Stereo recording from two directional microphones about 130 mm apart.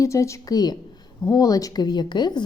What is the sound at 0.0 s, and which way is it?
A woman's voice, 25° left (ahead or behind).